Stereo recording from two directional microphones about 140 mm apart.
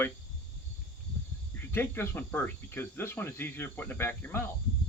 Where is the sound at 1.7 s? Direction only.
15° left (ahead or behind).